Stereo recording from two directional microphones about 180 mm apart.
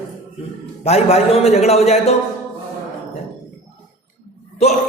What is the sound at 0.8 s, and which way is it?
A man's voice, 35° left (ahead or behind).